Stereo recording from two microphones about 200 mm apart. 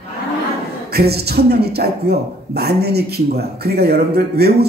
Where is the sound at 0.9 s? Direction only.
50° right (ahead or behind).